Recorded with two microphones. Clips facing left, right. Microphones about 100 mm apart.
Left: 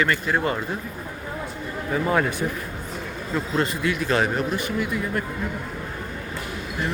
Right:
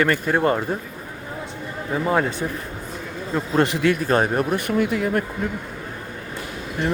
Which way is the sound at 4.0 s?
45° right (ahead or behind).